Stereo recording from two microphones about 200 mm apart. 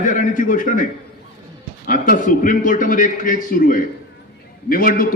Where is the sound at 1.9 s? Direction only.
40° left (ahead or behind).